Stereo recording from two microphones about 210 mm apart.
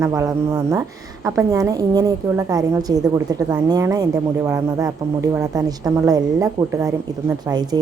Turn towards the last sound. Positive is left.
turn(degrees=-15)  # may be behind; listen again after turning